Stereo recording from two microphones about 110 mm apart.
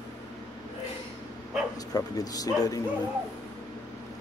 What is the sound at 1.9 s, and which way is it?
Speech, 35° left (ahead or behind).